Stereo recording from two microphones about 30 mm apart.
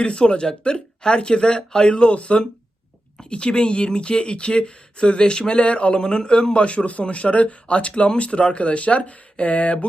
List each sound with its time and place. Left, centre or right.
0.0 s speech: left
2.1 s speech: left
3.2 s speech: left